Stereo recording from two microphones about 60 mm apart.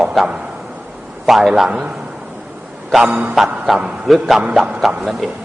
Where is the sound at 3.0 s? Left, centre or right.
Right.